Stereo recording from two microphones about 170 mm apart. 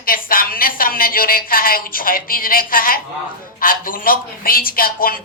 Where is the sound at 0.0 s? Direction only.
55° left (ahead or behind).